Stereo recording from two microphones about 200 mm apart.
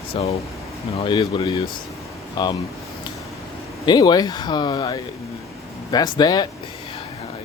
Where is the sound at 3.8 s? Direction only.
20° left (ahead or behind).